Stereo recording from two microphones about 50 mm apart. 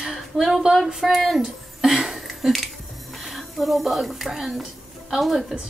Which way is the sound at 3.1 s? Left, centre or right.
Centre.